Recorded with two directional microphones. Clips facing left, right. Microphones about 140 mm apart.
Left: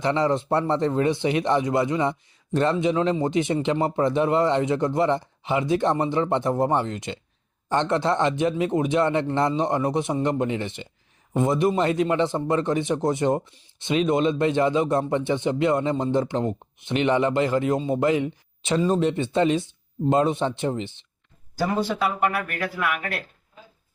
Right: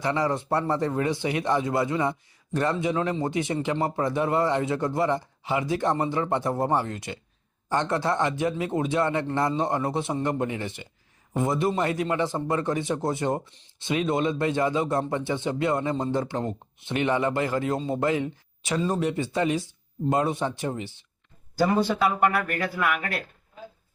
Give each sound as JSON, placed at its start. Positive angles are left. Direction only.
{"t": 0.0, "sound": "speech", "side_deg": 20}
{"t": 22.0, "sound": "speech", "side_deg": 5}